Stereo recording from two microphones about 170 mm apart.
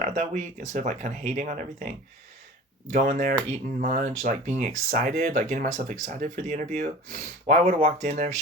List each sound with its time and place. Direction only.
0.0 s speech: 45° right (ahead or behind)
2.9 s speech: 50° right (ahead or behind)